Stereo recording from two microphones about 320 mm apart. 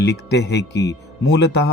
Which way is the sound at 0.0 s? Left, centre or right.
Left.